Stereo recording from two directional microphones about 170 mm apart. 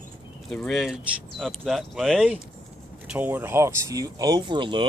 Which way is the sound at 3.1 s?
10° right (ahead or behind).